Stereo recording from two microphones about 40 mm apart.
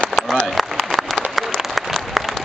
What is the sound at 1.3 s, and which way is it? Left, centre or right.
Applause, centre.